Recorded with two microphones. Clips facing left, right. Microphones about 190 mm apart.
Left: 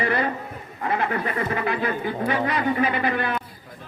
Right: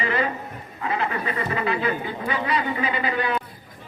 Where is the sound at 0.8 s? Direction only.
55° left (ahead or behind).